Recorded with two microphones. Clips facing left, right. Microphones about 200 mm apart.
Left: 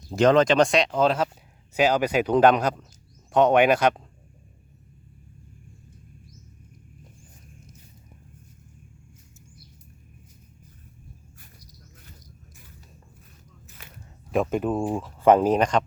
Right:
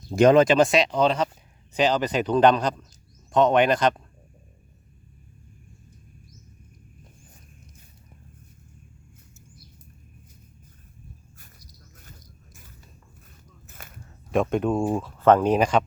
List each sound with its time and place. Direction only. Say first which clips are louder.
0.2 s speech: right 2 dB; 10° right (ahead or behind); by 3.9 s 10° left (ahead or behind)
13.7 s biting: right 3 dB; 50° right (ahead or behind)
14.3 s speech: right 1 dB; 5° left (ahead or behind)
15.4 s speech: right 1 dB; 5° right (ahead or behind)